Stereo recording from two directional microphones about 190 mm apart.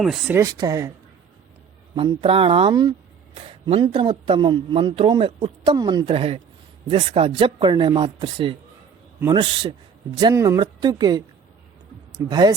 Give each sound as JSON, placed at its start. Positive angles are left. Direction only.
{"t": 0.0, "sound": "speech", "side_deg": 0}
{"t": 0.3, "sound": "speech", "side_deg": -20}
{"t": 2.0, "sound": "a man's voice", "side_deg": -25}
{"t": 12.3, "sound": "a man's voice", "side_deg": -20}